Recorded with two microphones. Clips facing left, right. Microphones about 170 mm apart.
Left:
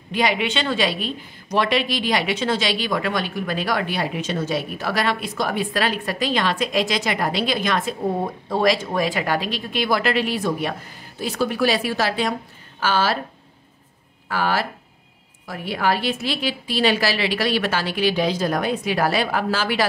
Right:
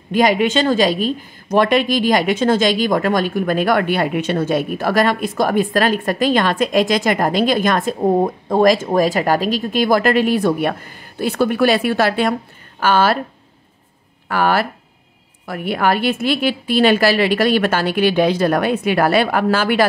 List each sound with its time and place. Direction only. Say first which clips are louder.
0.1 s a woman's voice: right 7 dB; 45° right (ahead or behind)
14.3 s a woman's voice: right 6 dB; 60° right (ahead or behind)